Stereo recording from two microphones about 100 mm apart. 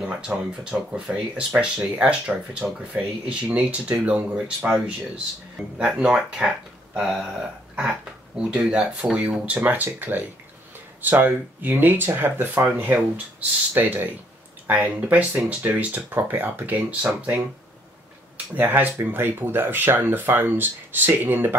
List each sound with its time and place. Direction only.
0.3 s speech: 15° right (ahead or behind)
18.5 s speech: 20° right (ahead or behind)